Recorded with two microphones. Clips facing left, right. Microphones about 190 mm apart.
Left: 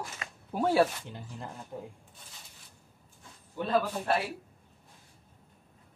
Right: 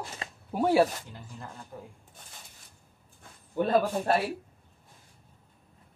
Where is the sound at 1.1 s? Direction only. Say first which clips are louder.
Left 2 dB; 20° left (ahead or behind).